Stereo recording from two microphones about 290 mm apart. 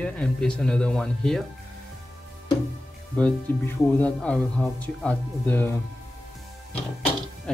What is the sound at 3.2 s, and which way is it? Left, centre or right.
Speech, centre.